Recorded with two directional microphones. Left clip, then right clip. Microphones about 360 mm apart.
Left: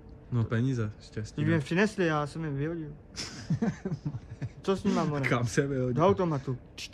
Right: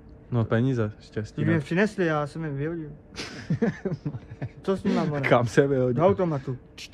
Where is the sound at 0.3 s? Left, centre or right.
Centre.